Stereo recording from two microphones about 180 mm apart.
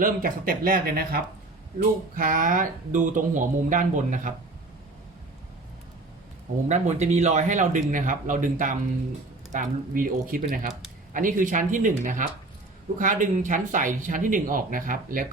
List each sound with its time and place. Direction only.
0.0 s speech: 50° right (ahead or behind)
6.7 s speech: 40° right (ahead or behind)